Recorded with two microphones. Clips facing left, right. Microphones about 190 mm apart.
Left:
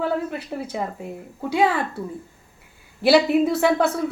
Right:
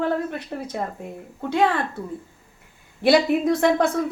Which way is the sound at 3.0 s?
5° left (ahead or behind).